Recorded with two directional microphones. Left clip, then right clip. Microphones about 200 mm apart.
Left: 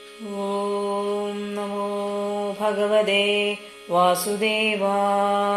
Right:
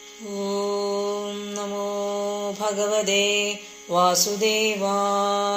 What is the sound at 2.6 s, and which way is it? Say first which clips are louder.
Mantra: left 4 dB; 35° right (ahead or behind).